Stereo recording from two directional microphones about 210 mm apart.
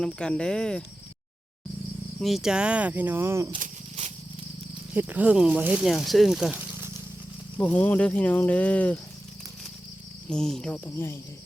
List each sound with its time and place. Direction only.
0.0 s speech: 5° left (ahead or behind)
2.2 s speech: centre (ahead or behind)
3.6 s snake: 30° right (ahead or behind)
4.9 s speech: 10° right (ahead or behind)
7.6 s speech: 5° left (ahead or behind)
10.2 s speech: 5° left (ahead or behind)